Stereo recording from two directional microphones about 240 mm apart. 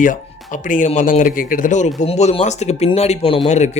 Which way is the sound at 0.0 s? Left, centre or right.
Left.